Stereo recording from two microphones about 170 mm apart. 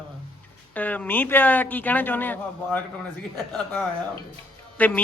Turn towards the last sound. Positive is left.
turn(degrees=10)  # may be behind; listen again after turning